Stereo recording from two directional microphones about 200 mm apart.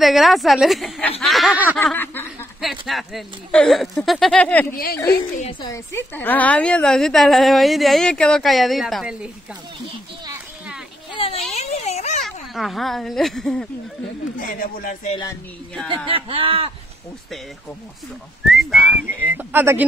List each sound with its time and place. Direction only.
0.0 s a woman's voice: centre (ahead or behind)
1.8 s snicker: 10° left (ahead or behind)
2.9 s a woman's voice: centre (ahead or behind)
5.1 s a woman's voice: 40° left (ahead or behind)
5.5 s speech: 25° left (ahead or behind)
5.9 s a woman's voice: 10° left (ahead or behind)
11.2 s a sound: 25° left (ahead or behind)
12.2 s speech: centre (ahead or behind)
14.4 s speech: 45° left (ahead or behind)
15.0 s speech: 20° left (ahead or behind)
16.1 s speech: 25° right (ahead or behind)
18.4 s a woman's voice: centre (ahead or behind)
19.3 s speech: 10° right (ahead or behind)